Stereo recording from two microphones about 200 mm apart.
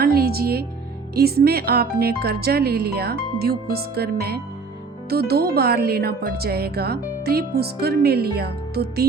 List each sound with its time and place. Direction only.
0.0 s music: 50° right (ahead or behind)
1.1 s speech: 50° right (ahead or behind)